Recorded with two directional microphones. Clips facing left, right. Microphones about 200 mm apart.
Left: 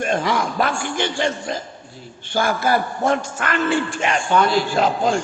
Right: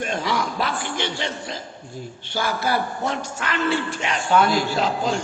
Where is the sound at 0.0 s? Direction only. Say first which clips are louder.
Left 4 dB; 50° left (ahead or behind).